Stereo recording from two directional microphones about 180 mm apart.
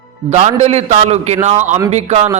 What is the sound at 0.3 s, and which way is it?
A man's voice, 35° right (ahead or behind).